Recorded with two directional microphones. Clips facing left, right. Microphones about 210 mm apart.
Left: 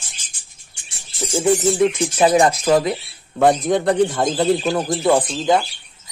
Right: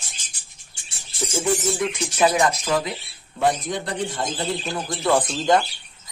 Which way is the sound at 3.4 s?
50° left (ahead or behind).